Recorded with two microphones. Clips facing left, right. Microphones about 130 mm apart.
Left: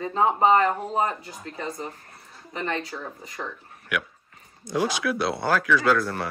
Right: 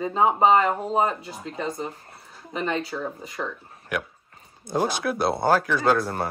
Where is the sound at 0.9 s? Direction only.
25° right (ahead or behind).